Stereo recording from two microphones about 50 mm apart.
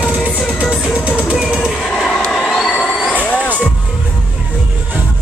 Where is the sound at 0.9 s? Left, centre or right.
Centre.